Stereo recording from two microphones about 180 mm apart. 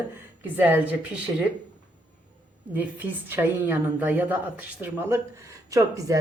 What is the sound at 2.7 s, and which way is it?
Speech, 10° right (ahead or behind).